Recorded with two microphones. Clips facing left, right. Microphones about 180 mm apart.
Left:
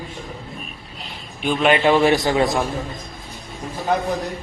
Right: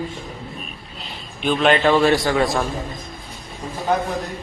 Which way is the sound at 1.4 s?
10° left (ahead or behind).